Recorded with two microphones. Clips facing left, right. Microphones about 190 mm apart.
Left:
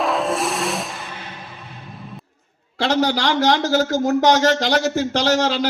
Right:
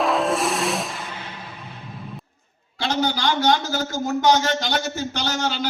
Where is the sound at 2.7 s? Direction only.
75° left (ahead or behind).